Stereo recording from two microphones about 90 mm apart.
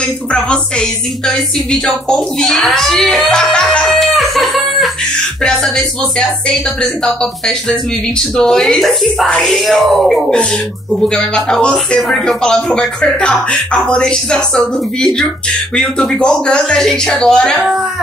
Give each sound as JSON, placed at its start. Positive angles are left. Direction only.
{"t": 0.3, "sound": "speech", "side_deg": 10}